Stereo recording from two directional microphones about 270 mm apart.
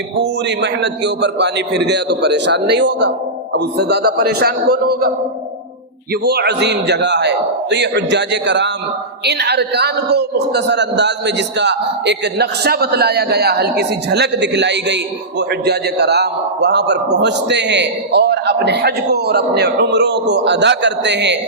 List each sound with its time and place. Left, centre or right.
0.2 s a man's voice: right
6.2 s a man's voice: right